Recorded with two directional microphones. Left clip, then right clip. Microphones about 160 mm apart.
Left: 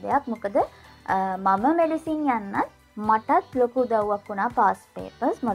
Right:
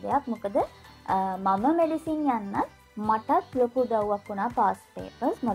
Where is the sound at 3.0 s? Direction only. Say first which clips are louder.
Left 3 dB; 25° left (ahead or behind).